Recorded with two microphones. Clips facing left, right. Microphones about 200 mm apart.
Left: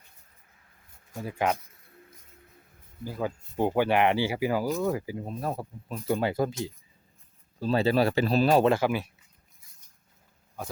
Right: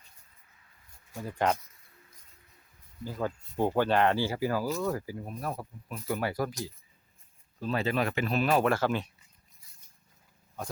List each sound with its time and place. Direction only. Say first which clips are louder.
1.1 s speech: left 1 dB; 10° left (ahead or behind)
3.0 s speech: left 2 dB; 10° left (ahead or behind); by 8.7 s 30° left (ahead or behind)
8.7 s speech: left 3 dB; 10° left (ahead or behind)